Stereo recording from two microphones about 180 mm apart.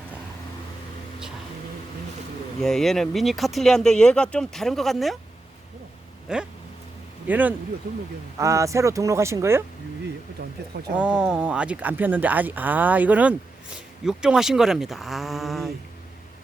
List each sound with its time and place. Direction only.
2.6 s speech: centre (ahead or behind)
6.2 s speech: 5° right (ahead or behind)
10.9 s speech: 5° right (ahead or behind)